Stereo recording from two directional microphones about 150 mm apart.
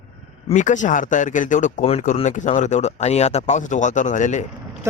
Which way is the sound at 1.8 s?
45° left (ahead or behind).